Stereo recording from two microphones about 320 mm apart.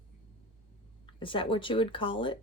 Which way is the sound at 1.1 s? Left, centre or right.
Centre.